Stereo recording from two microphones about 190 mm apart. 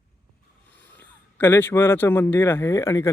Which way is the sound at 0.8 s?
10° left (ahead or behind).